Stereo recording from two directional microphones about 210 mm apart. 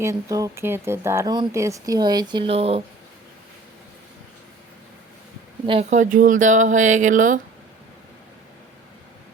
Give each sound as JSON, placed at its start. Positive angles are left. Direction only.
{"t": 0.0, "sound": "speech", "side_deg": -15}
{"t": 5.6, "sound": "speech", "side_deg": -30}